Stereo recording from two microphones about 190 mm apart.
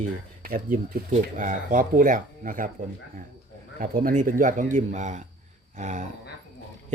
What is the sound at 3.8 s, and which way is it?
Speech, 45° right (ahead or behind).